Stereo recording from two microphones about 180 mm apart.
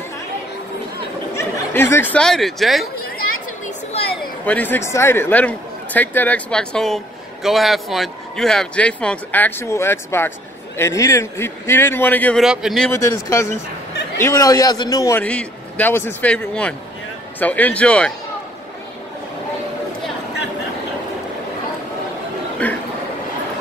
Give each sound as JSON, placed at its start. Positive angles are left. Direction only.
{"t": 1.3, "sound": "speech", "side_deg": 15}
{"t": 3.6, "sound": "a sound", "side_deg": 35}
{"t": 4.5, "sound": "a man's voice", "side_deg": 10}
{"t": 12.9, "sound": "a man's voice", "side_deg": 15}
{"t": 22.6, "sound": "a man's voice", "side_deg": 10}